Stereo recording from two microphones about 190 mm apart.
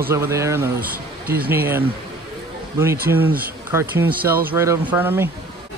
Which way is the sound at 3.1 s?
10° right (ahead or behind).